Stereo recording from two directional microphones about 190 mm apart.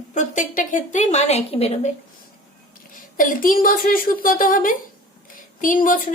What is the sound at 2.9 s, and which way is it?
Speech, 45° left (ahead or behind).